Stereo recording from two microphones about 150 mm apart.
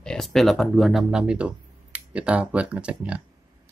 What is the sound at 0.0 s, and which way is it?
Speech, 5° left (ahead or behind).